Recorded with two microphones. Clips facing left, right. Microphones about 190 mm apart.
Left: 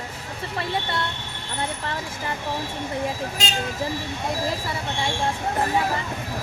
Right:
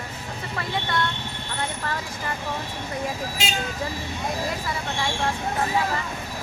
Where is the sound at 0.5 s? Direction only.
25° left (ahead or behind).